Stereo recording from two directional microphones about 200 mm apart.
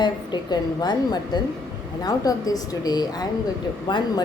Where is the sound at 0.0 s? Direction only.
20° left (ahead or behind).